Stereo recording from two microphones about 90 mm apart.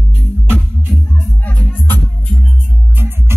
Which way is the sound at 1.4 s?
15° left (ahead or behind).